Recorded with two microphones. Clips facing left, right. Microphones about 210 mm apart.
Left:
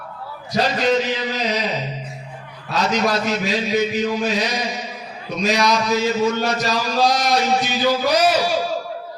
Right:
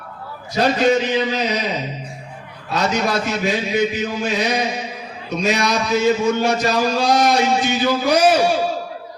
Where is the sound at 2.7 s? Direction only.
55° right (ahead or behind).